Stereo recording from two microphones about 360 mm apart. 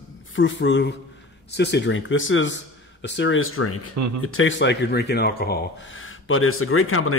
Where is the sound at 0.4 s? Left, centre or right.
Left.